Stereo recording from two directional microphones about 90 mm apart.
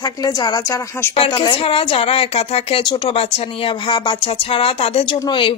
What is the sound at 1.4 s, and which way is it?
A woman's voice, 90° left.